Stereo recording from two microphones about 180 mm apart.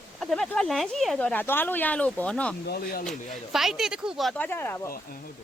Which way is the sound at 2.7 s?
55° left (ahead or behind).